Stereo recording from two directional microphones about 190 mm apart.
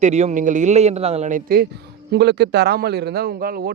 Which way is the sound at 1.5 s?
60° right (ahead or behind).